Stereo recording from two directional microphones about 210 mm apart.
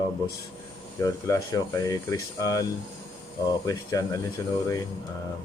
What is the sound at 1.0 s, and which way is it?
Speech, 15° left (ahead or behind).